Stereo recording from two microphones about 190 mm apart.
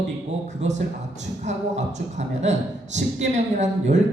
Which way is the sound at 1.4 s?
35° right (ahead or behind).